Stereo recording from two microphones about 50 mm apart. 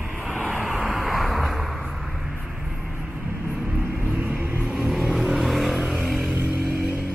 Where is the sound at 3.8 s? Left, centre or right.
Right.